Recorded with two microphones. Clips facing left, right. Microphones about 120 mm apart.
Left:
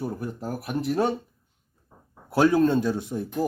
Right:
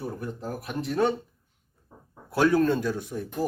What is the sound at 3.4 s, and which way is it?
Speech, 10° right (ahead or behind).